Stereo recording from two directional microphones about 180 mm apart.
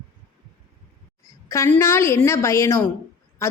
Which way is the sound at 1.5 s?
15° left (ahead or behind).